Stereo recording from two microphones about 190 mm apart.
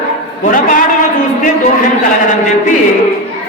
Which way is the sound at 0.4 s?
45° left (ahead or behind).